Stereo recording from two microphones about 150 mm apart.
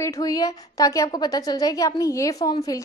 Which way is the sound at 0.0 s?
20° left (ahead or behind).